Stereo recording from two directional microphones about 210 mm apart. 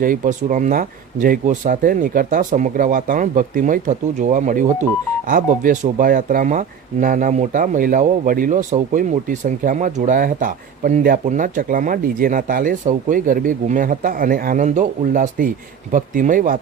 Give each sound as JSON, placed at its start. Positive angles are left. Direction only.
{"t": 0.0, "sound": "speech", "side_deg": -40}